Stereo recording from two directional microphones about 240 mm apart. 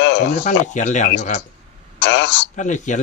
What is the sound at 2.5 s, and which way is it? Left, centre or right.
Speech, left.